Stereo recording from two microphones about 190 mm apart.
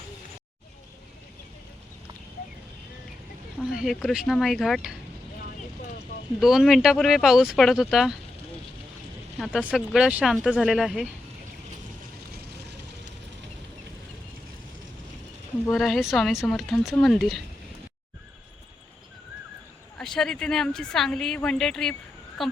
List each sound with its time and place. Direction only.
3.8 s a woman's voice: centre (ahead or behind)
6.4 s a woman's voice: centre (ahead or behind)
9.4 s a woman's voice: 5° right (ahead or behind)
15.7 s a woman's voice: centre (ahead or behind)
20.0 s a woman's voice: 5° left (ahead or behind)